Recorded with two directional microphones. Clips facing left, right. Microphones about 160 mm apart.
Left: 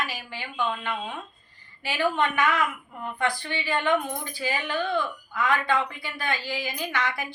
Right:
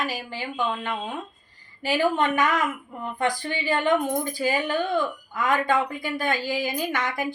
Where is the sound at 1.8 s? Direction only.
40° right (ahead or behind).